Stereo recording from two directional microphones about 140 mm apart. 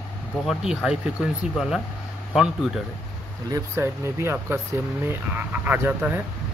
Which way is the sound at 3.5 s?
20° right (ahead or behind).